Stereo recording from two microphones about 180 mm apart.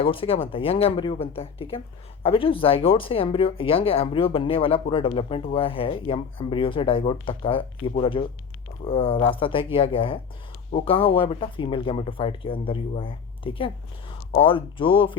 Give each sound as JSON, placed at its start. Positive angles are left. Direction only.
{"t": 0.0, "sound": "speech", "side_deg": 30}